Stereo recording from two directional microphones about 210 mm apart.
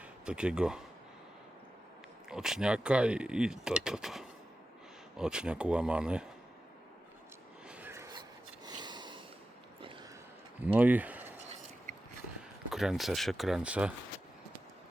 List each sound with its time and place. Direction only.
0.0 s speech: 5° right (ahead or behind)
2.3 s speech: centre (ahead or behind)
7.7 s a sound: 10° right (ahead or behind)
8.6 s snort: 20° right (ahead or behind)
10.6 s speech: 10° right (ahead or behind)
12.7 s speech: centre (ahead or behind)